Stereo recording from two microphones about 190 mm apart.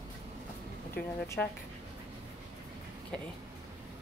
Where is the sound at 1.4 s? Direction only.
5° left (ahead or behind).